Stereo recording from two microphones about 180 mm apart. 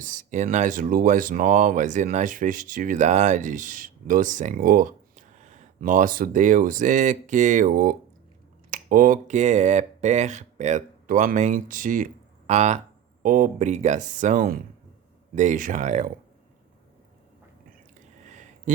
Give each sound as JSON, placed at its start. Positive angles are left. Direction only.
{"t": 0.0, "sound": "speech", "side_deg": -45}
{"t": 13.2, "sound": "speech", "side_deg": -50}
{"t": 18.3, "sound": "a sound", "side_deg": -45}